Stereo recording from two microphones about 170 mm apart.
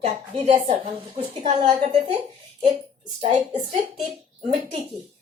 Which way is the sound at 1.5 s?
25° right (ahead or behind).